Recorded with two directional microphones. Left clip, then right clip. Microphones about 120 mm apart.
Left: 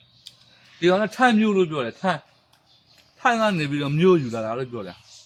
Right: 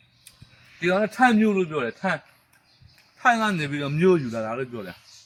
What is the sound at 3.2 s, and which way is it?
Speech, 20° left (ahead or behind).